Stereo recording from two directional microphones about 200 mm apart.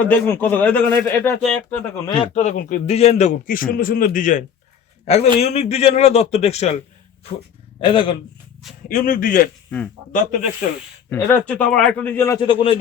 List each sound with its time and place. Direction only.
0.0 s a man's voice: 10° left (ahead or behind)
2.0 s speech: 25° left (ahead or behind)
2.3 s a man's voice: 40° left (ahead or behind)
7.8 s speech: 25° left (ahead or behind)
8.9 s a man's voice: 40° left (ahead or behind)
9.6 s speech: 5° left (ahead or behind)
10.1 s a man's voice: 40° left (ahead or behind)
11.1 s a man's voice: 10° left (ahead or behind); by 12.8 s 25° left (ahead or behind)